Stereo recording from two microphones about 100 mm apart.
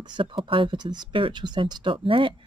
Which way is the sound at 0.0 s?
50° right (ahead or behind).